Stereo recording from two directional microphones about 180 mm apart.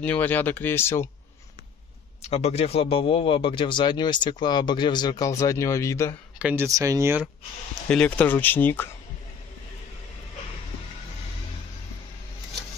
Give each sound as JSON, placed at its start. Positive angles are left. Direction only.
{"t": 0.0, "sound": "speech", "side_deg": 10}
{"t": 2.2, "sound": "a man's voice", "side_deg": 35}
{"t": 6.3, "sound": "speech", "side_deg": -10}
{"t": 7.9, "sound": "speech", "side_deg": 5}